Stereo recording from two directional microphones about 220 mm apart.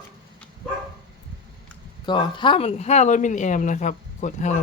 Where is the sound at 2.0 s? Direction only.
20° left (ahead or behind).